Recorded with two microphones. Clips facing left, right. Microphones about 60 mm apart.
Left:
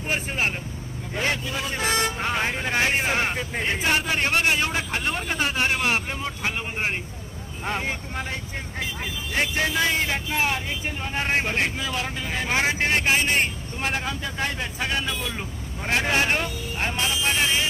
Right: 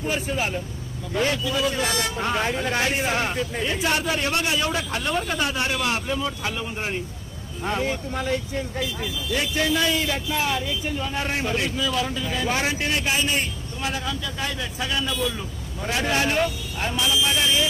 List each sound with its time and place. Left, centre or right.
0.1 s speech: left